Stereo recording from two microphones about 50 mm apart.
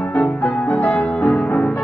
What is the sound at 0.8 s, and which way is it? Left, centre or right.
Music, left.